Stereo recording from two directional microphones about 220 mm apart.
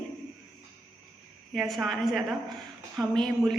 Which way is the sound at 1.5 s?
Centre (ahead or behind).